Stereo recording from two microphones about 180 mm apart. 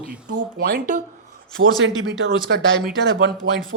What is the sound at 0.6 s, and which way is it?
Speech, 55° right (ahead or behind).